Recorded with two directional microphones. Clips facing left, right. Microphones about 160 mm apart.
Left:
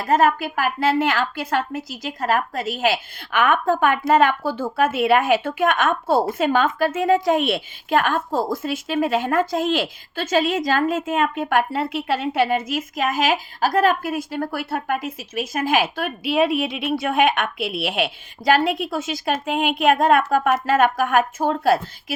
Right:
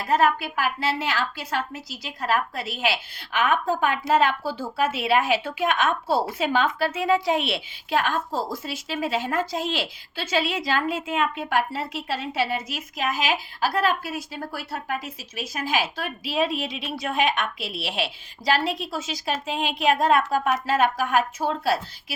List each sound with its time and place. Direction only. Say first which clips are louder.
0.0 s a woman's voice: left 3 dB; 45° left (ahead or behind)